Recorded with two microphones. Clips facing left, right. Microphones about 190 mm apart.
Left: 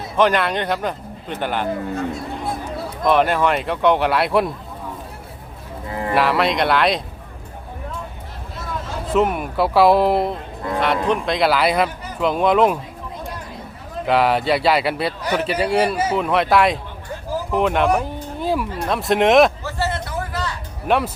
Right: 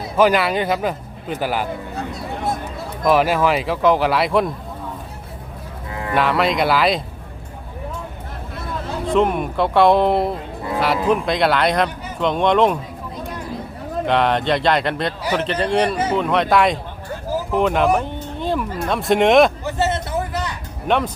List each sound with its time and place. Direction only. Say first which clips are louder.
0.2 s speech: right 2 dB; 5° right (ahead or behind)
2.1 s a sound: right 2 dB; 45° right (ahead or behind)
3.1 s speech: right 1 dB; 5° right (ahead or behind)
6.1 s speech: even; centre (ahead or behind)
9.0 s speech: right 1 dB; 5° left (ahead or behind)
14.0 s speech: left 1 dB; 5° left (ahead or behind)
19.6 s a sound: right 3 dB; 20° right (ahead or behind)
20.8 s speech: even; 5° left (ahead or behind)